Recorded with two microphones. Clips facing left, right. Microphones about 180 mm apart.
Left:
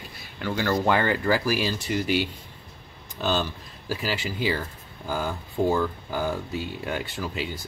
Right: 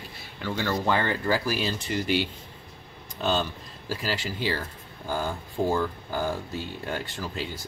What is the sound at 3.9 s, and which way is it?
Speech, 10° left (ahead or behind).